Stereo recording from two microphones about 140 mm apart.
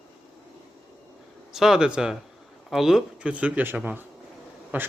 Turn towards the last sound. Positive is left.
turn(degrees=-15)  # may be behind; listen again after turning